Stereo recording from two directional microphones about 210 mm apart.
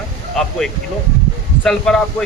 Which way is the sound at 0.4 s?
Centre (ahead or behind).